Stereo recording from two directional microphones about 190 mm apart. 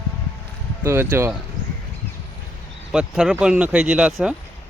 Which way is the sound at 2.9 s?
5° right (ahead or behind).